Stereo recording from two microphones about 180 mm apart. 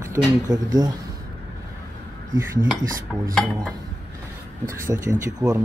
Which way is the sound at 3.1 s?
5° right (ahead or behind).